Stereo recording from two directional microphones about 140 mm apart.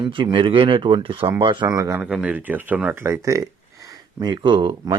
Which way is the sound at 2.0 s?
10° right (ahead or behind).